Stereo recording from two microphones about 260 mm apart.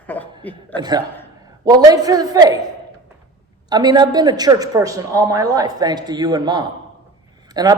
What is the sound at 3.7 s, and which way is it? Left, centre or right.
A woman's voice, centre.